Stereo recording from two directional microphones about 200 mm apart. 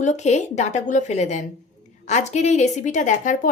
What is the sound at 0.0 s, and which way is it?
A woman's voice, 35° left (ahead or behind).